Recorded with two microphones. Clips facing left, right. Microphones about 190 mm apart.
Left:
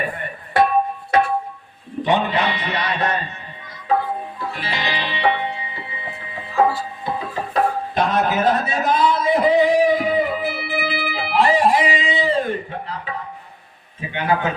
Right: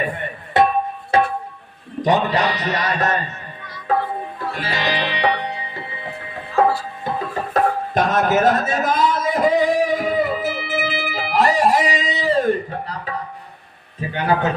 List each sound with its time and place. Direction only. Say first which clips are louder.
0.6 s music: right 1 dB; 25° right (ahead or behind)
1.1 s a sound: right 1 dB; 30° right (ahead or behind)
2.0 s a man's voice: right 1 dB; 40° right (ahead or behind)
4.6 s music: right 4 dB; 45° right (ahead or behind)
7.5 s a sound: right 1 dB; 45° right (ahead or behind)
14.1 s a man's voice: right 1 dB; 40° right (ahead or behind)